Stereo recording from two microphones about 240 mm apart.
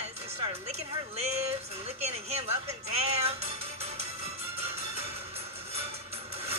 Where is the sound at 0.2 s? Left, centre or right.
Right.